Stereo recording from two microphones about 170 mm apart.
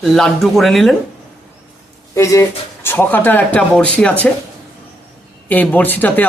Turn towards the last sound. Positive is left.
turn(degrees=10)  # may be behind; listen again after turning